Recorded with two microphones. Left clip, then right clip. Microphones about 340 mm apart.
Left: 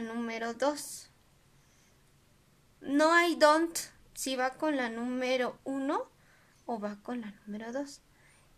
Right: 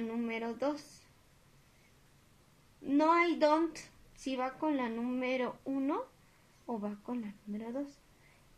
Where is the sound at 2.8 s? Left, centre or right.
Left.